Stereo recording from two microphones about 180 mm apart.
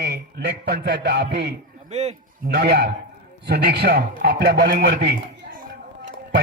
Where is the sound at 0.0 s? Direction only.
65° right (ahead or behind).